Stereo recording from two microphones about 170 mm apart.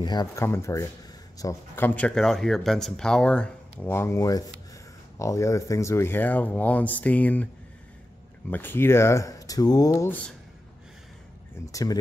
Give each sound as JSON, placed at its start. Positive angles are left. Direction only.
{"t": 0.0, "sound": "speech", "side_deg": 25}
{"t": 8.5, "sound": "speech", "side_deg": 10}
{"t": 11.6, "sound": "speech", "side_deg": 20}